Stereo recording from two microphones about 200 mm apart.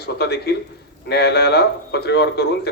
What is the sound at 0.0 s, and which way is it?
A man's voice, 55° left (ahead or behind).